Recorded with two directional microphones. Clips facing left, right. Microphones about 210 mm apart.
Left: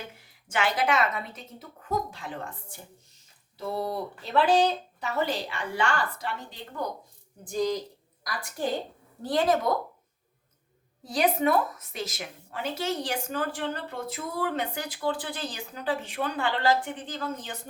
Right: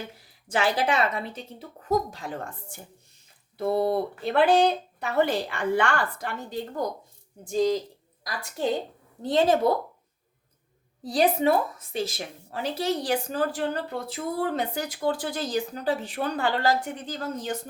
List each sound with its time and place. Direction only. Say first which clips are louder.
0.4 s speech: right 2 dB; 35° right (ahead or behind)
3.6 s speech: right 7 dB; 60° right (ahead or behind)
7.4 s speech: right 4 dB; 25° right (ahead or behind)
11.0 s speech: right 3 dB; 35° right (ahead or behind)